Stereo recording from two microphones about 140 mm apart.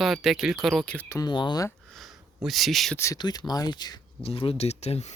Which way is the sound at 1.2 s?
35° left (ahead or behind).